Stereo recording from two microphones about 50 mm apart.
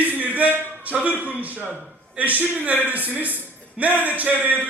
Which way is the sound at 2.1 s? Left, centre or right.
Right.